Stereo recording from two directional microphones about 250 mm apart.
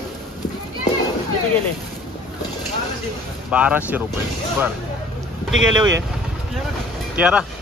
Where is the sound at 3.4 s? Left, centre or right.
Centre.